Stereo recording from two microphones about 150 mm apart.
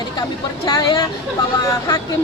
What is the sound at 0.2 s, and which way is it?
Speech, 30° left (ahead or behind).